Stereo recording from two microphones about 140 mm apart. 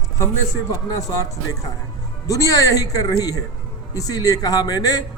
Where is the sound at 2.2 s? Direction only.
25° left (ahead or behind).